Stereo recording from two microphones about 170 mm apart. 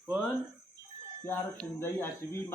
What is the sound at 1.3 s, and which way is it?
Speech, 15° left (ahead or behind).